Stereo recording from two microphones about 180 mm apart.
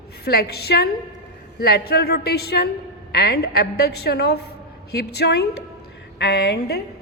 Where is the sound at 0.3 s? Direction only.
60° left (ahead or behind).